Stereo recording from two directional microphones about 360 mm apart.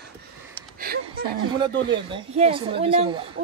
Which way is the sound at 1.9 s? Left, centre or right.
Centre.